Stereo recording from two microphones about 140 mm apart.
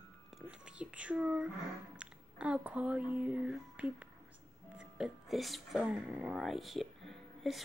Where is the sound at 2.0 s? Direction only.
5° right (ahead or behind).